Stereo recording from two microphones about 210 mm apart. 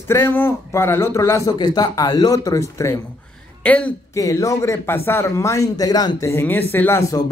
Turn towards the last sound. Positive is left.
turn(degrees=15)  # may be behind; listen again after turning